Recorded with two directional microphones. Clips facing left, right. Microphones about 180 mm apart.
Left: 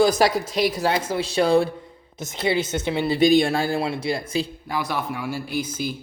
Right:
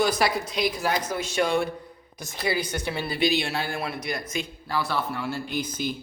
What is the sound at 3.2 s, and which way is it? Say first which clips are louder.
Speech: left 8 dB; 50° left (ahead or behind).